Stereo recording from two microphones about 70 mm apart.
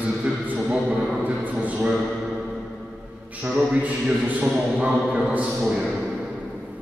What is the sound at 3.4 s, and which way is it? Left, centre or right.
A man's voice, centre.